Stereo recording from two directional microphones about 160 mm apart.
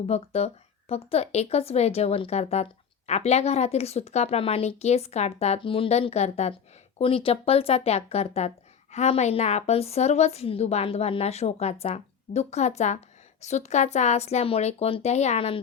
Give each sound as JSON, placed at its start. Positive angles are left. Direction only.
{"t": 0.1, "sound": "speech", "side_deg": 40}